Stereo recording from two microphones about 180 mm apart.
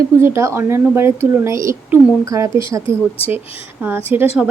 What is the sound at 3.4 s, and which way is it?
Speech, 30° left (ahead or behind).